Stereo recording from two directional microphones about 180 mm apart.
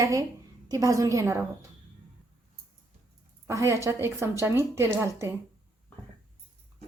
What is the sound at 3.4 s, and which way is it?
A woman's voice, 15° right (ahead or behind).